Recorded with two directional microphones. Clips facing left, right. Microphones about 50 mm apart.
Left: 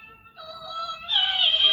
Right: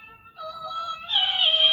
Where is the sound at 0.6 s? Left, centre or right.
Right.